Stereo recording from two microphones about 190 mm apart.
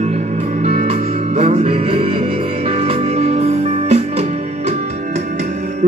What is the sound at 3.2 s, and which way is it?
Music, 35° right (ahead or behind).